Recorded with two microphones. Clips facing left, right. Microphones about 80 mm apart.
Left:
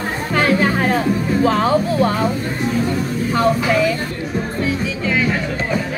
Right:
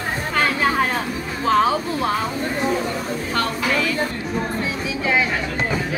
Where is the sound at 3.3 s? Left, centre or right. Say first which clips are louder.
Left 6 dB; centre.